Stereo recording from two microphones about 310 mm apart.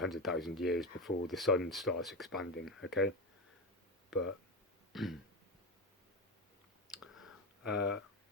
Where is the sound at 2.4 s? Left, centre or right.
Left.